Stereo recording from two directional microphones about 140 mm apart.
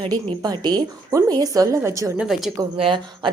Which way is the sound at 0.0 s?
30° right (ahead or behind).